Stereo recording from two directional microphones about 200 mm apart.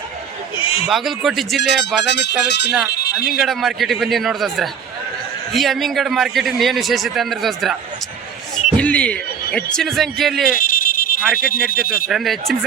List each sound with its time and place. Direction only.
0.6 s bleat: 30° left (ahead or behind)
0.9 s a man's voice: centre (ahead or behind)
2.0 s speech: 60° left (ahead or behind)
2.9 s a sound: 55° left (ahead or behind)
3.3 s a man's voice: centre (ahead or behind)
10.6 s a sound: 45° left (ahead or behind)
11.3 s speech: 45° left (ahead or behind)
12.0 s a man's voice: centre (ahead or behind)